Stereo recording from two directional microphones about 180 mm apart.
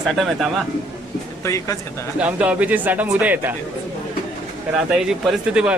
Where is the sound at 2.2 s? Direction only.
10° right (ahead or behind).